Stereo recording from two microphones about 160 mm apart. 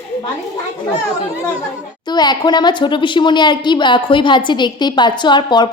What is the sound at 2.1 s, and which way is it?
A woman's voice, 25° left (ahead or behind).